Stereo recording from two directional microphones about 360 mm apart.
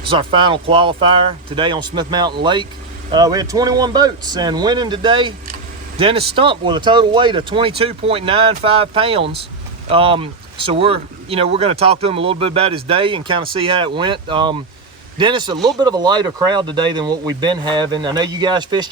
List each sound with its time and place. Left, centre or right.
0.1 s speech: centre